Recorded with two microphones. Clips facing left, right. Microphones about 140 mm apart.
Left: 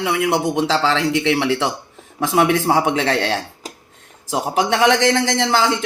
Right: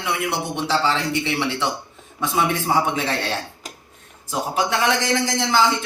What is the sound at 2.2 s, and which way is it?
A man's voice, 80° left.